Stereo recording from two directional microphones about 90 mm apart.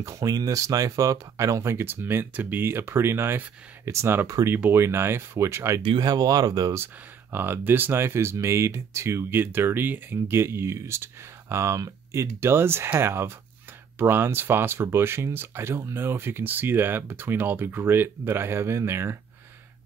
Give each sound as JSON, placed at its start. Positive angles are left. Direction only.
{"t": 0.0, "sound": "speech", "side_deg": -40}
{"t": 5.9, "sound": "speech", "side_deg": -45}
{"t": 7.3, "sound": "speech", "side_deg": -25}